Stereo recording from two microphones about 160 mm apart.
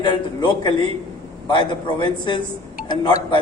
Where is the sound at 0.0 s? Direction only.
30° left (ahead or behind).